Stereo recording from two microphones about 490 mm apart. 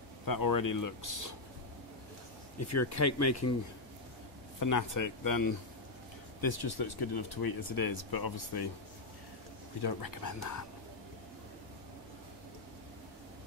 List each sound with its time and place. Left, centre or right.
0.2 s speech: left
2.7 s speech: left
4.6 s speech: left
9.8 s speech: left